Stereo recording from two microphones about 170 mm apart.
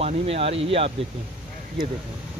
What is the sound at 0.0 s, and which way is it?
Speech, 35° right (ahead or behind).